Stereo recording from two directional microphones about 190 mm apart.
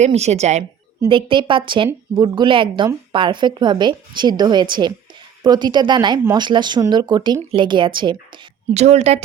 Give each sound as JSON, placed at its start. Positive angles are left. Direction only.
{"t": 0.0, "sound": "a woman's voice", "side_deg": -35}
{"t": 1.0, "sound": "a woman's voice", "side_deg": -25}
{"t": 8.7, "sound": "a woman's voice", "side_deg": -35}